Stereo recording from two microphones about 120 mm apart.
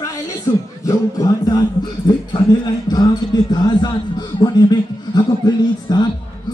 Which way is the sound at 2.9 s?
35° left (ahead or behind).